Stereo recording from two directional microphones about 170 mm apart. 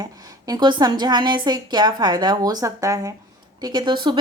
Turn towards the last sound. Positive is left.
turn(degrees=-25)  # may be behind; listen again after turning